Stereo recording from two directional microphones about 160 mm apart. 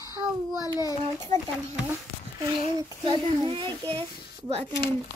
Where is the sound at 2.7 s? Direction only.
25° right (ahead or behind).